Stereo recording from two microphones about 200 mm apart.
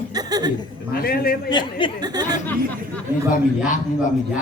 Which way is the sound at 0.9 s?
50° left (ahead or behind).